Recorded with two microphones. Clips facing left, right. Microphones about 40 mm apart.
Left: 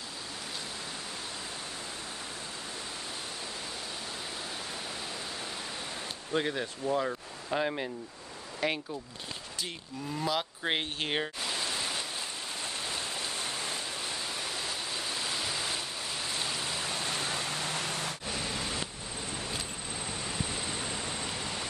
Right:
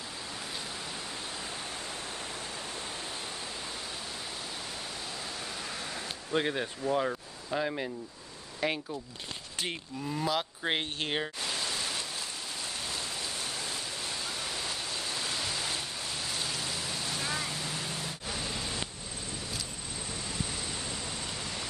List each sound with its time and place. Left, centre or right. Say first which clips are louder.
6.3 s speech: right 1 dB; centre
7.5 s speech: left 1 dB; centre
8.6 s speech: even; centre
10.1 s speech: even; centre
11.7 s rain: left 1 dB; centre
12.8 s a sound: left 1 dB; left
14.9 s a sound: even; centre
16.3 s waterfall: left 1 dB; centre; by 18.1 s left
18.3 s a sound: even; centre
20.2 s vehicle: left 2 dB; centre